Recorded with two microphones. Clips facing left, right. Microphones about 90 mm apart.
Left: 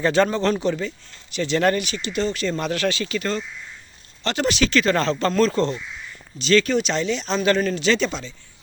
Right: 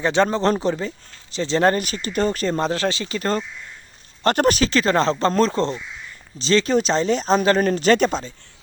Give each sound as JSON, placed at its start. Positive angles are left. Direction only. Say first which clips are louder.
{"t": 0.0, "sound": "a man's voice", "louder": "even", "side_deg": -20}
{"t": 0.3, "sound": "speech", "louder": "right 1 dB", "side_deg": -35}
{"t": 1.8, "sound": "speech", "louder": "right 2 dB", "side_deg": -40}
{"t": 4.2, "sound": "speech", "louder": "right 4 dB", "side_deg": -45}